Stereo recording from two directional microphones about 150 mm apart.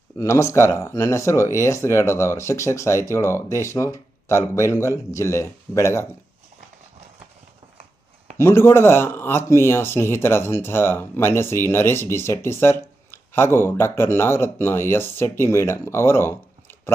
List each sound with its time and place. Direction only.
0.2 s speech: 20° left (ahead or behind)
8.4 s speech: 15° left (ahead or behind)